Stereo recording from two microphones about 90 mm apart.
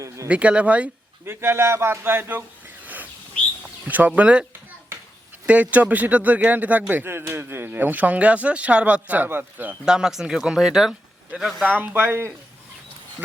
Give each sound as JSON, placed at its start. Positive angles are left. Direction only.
{"t": 0.3, "sound": "a man's voice", "side_deg": -15}
{"t": 1.2, "sound": "speech", "side_deg": -25}
{"t": 2.8, "sound": "bird", "side_deg": -20}
{"t": 3.8, "sound": "a man's voice", "side_deg": -20}
{"t": 5.5, "sound": "a man's voice", "side_deg": -15}
{"t": 9.8, "sound": "speech", "side_deg": -5}
{"t": 11.6, "sound": "speech", "side_deg": -20}